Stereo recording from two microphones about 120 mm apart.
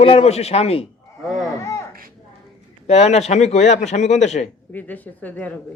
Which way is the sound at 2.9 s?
65° left (ahead or behind).